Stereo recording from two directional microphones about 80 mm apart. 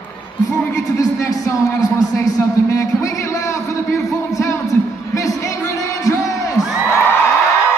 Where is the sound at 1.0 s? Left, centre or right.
Left.